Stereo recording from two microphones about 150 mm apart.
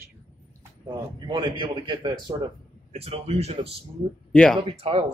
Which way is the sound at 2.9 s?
40° right (ahead or behind).